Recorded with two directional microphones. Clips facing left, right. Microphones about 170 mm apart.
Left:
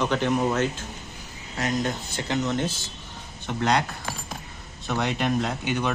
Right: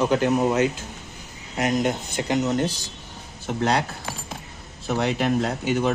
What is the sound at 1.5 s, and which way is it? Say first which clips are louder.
Speech: right 4 dB; 20° right (ahead or behind).